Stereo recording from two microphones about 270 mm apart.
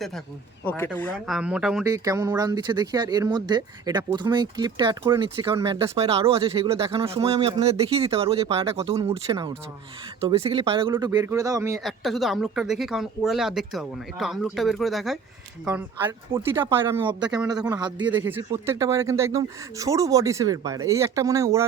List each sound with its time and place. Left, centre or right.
0.6 s speech: centre
11.8 s speech: centre